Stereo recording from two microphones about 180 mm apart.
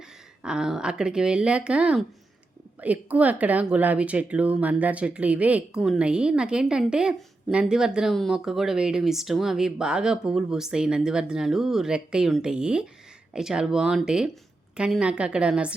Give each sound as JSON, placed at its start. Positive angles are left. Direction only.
{"t": 0.4, "sound": "speech", "side_deg": -5}